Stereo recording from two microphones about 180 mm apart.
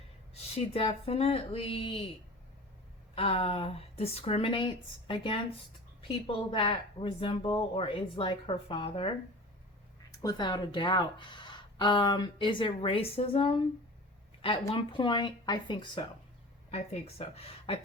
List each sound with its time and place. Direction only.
0.5 s speech: 30° left (ahead or behind)
3.2 s a woman's voice: 35° left (ahead or behind)
10.2 s a woman's voice: 25° left (ahead or behind)
14.7 s a woman's voice: 25° left (ahead or behind)